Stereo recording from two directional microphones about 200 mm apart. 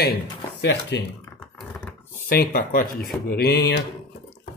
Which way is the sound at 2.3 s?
45° left (ahead or behind).